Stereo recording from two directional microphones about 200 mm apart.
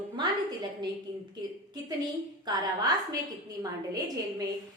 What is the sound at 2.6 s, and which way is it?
A woman's voice, 20° right (ahead or behind).